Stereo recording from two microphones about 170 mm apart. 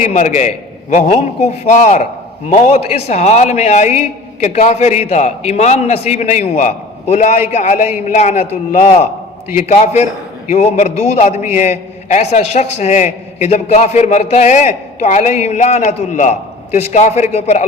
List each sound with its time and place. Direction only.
0.0 s a man's voice: 45° left (ahead or behind)